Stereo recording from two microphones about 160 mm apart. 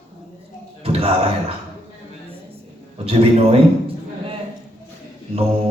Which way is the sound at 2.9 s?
35° right (ahead or behind).